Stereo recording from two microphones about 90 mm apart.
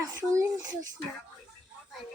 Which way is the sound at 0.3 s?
40° right (ahead or behind).